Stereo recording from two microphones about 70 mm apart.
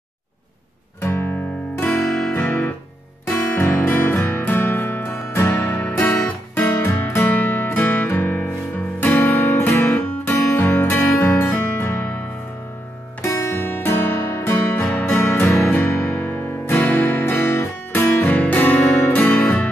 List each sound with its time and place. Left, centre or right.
1.0 s music: left
2.3 s music: left
5.9 s guitar: left
6.5 s music: left
12.0 s music: left
13.2 s music: left